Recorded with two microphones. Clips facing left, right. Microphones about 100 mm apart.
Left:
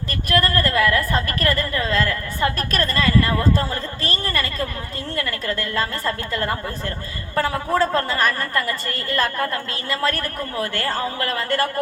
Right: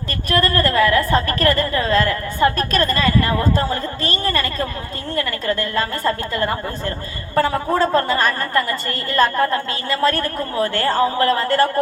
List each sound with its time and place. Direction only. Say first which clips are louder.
0.3 s a woman's voice: right 2 dB; 25° right (ahead or behind)
6.1 s a woman's voice: right 4 dB; 25° right (ahead or behind)